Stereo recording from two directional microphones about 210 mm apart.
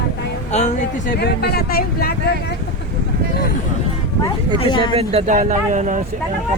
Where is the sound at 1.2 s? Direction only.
50° left (ahead or behind).